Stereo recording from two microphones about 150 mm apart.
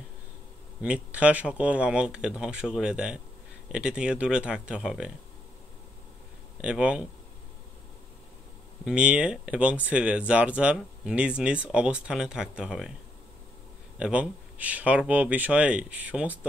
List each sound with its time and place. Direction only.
0.8 s speech: 10° right (ahead or behind)
6.6 s speech: 5° right (ahead or behind)
8.8 s speech: 10° right (ahead or behind)
13.9 s speech: 5° right (ahead or behind)